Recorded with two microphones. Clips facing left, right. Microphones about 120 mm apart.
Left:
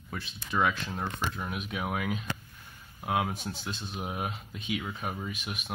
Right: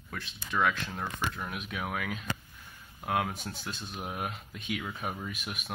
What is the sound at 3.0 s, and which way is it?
Speech, 5° left (ahead or behind).